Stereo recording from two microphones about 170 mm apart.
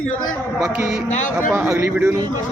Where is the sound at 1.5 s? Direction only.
15° right (ahead or behind).